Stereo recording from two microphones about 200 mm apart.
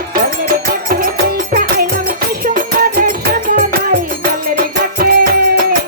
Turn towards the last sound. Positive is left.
turn(degrees=-45)  # may be behind; listen again after turning